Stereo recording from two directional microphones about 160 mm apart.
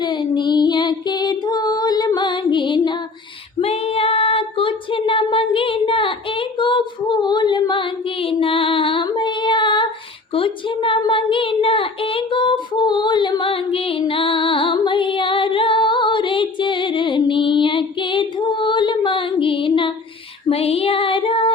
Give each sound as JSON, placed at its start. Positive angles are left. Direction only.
{"t": 0.0, "sound": "music", "side_deg": 30}
{"t": 3.6, "sound": "female singing", "side_deg": 40}
{"t": 10.3, "sound": "child singing", "side_deg": 35}
{"t": 20.5, "sound": "music", "side_deg": 40}